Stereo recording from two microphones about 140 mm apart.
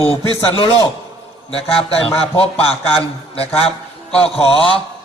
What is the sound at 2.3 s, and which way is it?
A man's voice, 45° left (ahead or behind).